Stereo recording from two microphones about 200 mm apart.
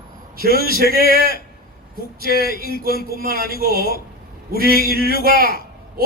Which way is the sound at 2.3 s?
50° left (ahead or behind).